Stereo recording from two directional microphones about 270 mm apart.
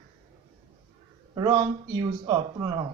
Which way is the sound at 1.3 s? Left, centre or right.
Centre.